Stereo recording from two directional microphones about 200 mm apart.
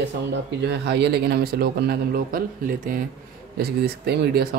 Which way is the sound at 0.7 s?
55° right (ahead or behind).